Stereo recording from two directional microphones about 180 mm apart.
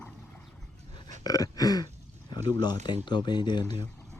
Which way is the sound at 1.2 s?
20° left (ahead or behind).